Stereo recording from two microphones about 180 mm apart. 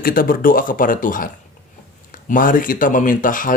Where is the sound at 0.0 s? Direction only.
55° left (ahead or behind).